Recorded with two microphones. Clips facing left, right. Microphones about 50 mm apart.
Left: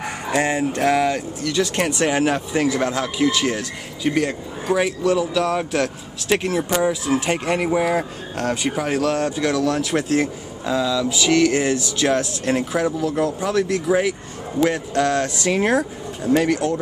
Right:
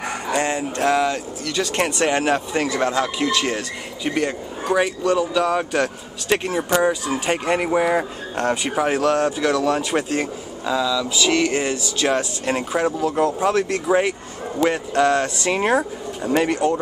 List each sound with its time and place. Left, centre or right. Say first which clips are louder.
0.4 s a sound: left 3 dB; centre
1.4 s speech: left 1 dB; centre
10.6 s speech: left 1 dB; centre
11.3 s speech: left 3 dB; centre
12.8 s speech: right 1 dB; right
14.6 s speech: right 1 dB; centre